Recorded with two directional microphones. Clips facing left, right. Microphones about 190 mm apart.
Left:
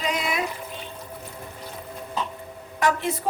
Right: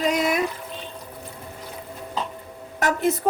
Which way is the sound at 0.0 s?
45° right (ahead or behind).